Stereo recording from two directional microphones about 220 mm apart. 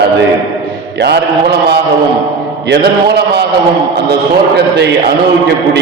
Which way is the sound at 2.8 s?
50° right (ahead or behind).